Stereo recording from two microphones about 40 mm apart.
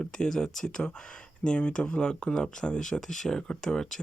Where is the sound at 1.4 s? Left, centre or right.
Left.